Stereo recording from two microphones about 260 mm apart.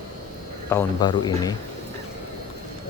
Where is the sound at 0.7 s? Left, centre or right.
Centre.